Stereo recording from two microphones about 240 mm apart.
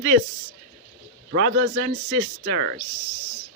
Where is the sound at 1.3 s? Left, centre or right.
Right.